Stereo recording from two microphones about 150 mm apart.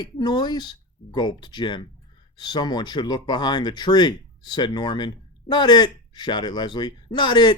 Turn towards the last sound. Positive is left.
turn(degrees=30)  # may be behind; listen again after turning